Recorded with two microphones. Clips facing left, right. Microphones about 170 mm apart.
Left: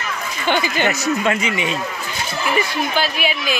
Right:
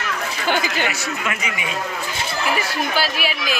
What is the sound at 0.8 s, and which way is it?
Speech, 35° left (ahead or behind).